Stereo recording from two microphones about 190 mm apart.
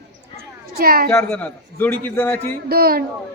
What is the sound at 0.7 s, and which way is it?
Speech, 50° right (ahead or behind).